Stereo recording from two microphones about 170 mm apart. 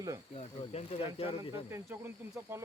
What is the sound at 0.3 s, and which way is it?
Speech, 35° left (ahead or behind).